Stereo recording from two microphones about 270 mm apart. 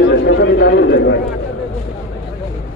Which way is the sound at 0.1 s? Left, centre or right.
Left.